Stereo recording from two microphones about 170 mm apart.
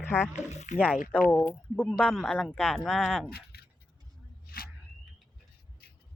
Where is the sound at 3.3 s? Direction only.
65° left (ahead or behind).